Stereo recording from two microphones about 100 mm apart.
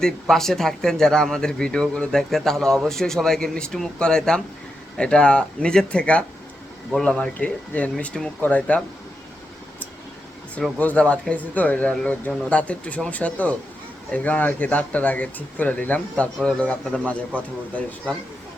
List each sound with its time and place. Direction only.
0.0 s speech: 5° left (ahead or behind)
10.8 s speech: 15° left (ahead or behind)